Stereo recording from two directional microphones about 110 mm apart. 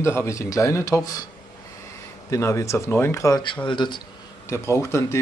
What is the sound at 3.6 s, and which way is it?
Speech, 45° left (ahead or behind).